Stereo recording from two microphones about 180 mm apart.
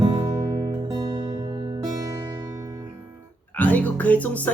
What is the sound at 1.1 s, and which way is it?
Music, 20° right (ahead or behind).